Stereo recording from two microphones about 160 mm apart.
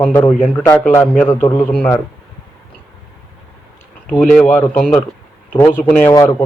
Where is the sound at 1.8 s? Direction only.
10° left (ahead or behind).